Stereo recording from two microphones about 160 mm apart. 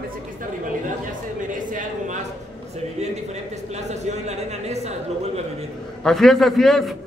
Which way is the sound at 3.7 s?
45° right (ahead or behind).